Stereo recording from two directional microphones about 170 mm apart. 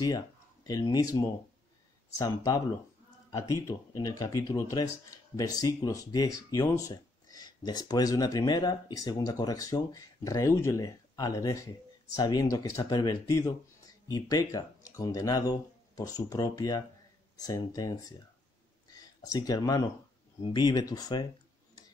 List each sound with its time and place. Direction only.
0.7 s speech: 20° left (ahead or behind)
18.9 s a sound: 20° left (ahead or behind)
20.4 s speech: 25° left (ahead or behind)